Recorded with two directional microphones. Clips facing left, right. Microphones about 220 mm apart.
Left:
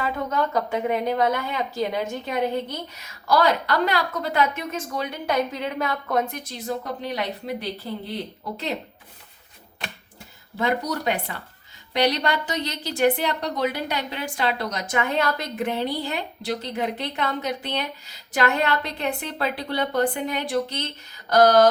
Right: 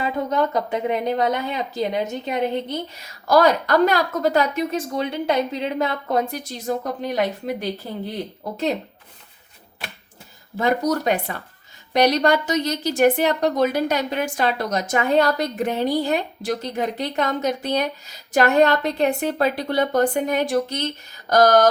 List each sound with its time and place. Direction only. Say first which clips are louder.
0.0 s a woman's voice: right 3 dB; 20° right (ahead or behind)
3.0 s a woman's voice: right 4 dB; 45° right (ahead or behind); by 6.4 s 30° right (ahead or behind)
6.5 s a woman's voice: right 4 dB; 45° right (ahead or behind)
10.6 s a woman's voice: right 4 dB; 45° right (ahead or behind)